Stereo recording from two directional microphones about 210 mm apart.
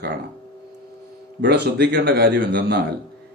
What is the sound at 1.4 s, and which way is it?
Speech, 50° right (ahead or behind).